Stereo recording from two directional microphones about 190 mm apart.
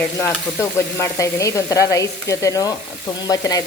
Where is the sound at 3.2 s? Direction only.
20° left (ahead or behind).